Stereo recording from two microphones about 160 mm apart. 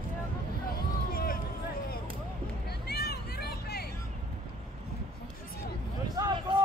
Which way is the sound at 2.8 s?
80° left.